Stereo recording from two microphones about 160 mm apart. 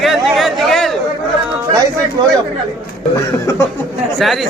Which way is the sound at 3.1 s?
15° left (ahead or behind).